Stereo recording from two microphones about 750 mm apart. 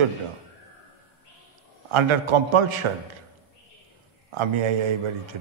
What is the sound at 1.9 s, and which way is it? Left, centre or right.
Speech, right.